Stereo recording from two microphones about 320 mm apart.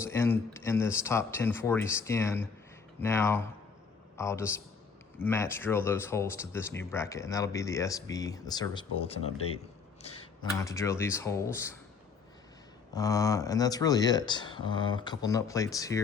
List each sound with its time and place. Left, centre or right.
0.0 s speech: centre
12.9 s speech: centre